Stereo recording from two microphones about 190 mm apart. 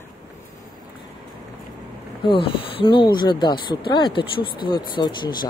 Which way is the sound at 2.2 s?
25° left (ahead or behind).